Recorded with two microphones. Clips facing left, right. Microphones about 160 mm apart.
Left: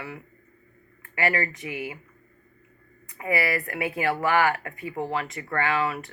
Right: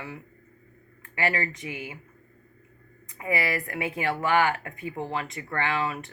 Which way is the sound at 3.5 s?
20° right (ahead or behind).